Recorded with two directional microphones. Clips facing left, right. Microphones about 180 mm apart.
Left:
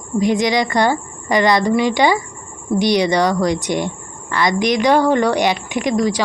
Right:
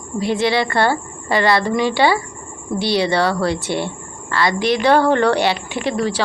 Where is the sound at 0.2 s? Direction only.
15° left (ahead or behind).